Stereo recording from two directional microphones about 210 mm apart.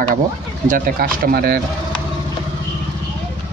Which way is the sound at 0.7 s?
45° right (ahead or behind).